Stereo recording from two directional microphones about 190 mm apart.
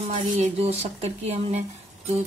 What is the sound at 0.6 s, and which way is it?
Speech, 35° right (ahead or behind).